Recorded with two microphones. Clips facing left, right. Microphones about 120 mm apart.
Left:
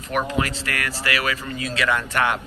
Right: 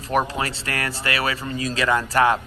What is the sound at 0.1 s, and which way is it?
A man's voice, 35° right (ahead or behind).